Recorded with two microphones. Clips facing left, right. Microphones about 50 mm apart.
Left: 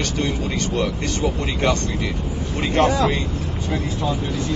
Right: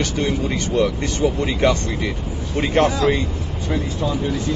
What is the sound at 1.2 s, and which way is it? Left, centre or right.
Speech, centre.